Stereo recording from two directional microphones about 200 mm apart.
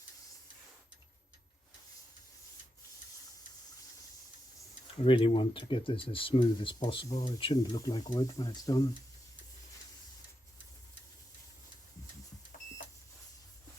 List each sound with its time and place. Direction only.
5.0 s speech: 25° left (ahead or behind)